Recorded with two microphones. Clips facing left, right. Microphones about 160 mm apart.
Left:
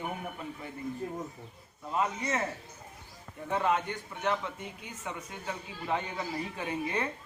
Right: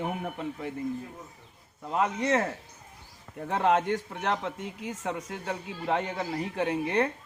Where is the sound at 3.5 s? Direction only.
75° right (ahead or behind).